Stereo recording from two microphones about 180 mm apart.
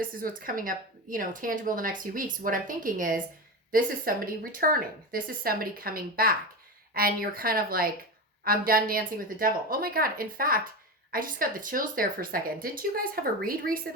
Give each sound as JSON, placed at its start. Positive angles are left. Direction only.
{"t": 0.0, "sound": "speech", "side_deg": -50}